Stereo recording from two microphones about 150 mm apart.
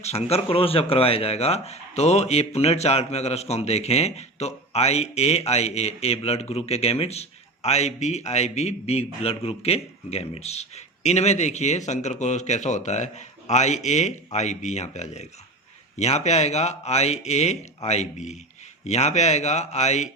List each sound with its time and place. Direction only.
0.0 s speech: 45° left (ahead or behind)